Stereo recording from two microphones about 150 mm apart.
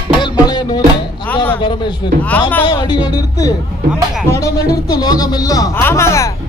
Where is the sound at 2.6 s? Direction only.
30° left (ahead or behind).